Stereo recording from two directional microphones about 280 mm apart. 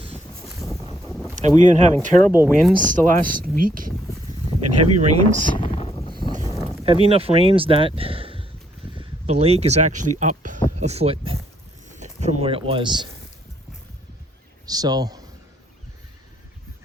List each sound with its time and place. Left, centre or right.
0.4 s boat: centre
0.7 s boat: centre
0.9 s a sound: centre
1.4 s speech: right
2.3 s a man's voice: centre
2.8 s speech: right
4.6 s speech: right
5.2 s speech: centre
6.4 s a sound: centre
6.8 s speech: centre
14.7 s a man's voice: centre